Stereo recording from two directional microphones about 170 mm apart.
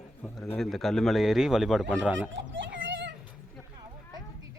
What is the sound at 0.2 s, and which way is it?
A man's voice, 5° left (ahead or behind).